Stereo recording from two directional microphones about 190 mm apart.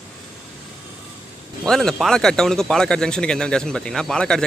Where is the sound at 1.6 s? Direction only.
5° left (ahead or behind).